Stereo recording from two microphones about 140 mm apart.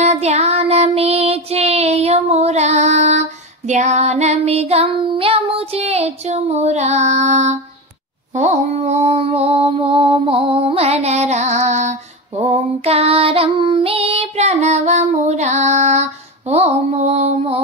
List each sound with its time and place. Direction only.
0.0 s child singing: 50° right (ahead or behind)
8.4 s mantra: 50° right (ahead or behind)